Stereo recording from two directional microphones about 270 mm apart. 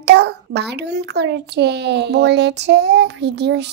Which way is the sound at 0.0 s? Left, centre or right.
Right.